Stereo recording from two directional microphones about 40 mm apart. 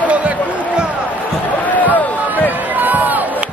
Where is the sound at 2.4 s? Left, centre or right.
Right.